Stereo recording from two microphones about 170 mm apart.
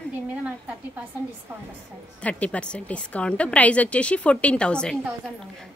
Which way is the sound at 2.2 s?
10° left (ahead or behind).